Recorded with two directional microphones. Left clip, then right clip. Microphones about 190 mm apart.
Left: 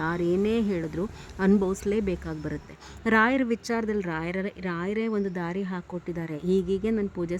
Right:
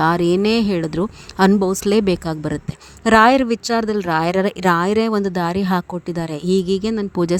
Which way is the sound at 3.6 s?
30° right (ahead or behind).